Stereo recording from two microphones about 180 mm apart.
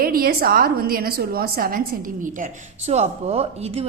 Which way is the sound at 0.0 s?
55° right (ahead or behind).